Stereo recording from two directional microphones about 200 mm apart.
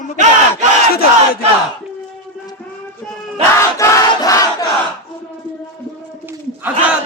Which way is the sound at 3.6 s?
15° left (ahead or behind).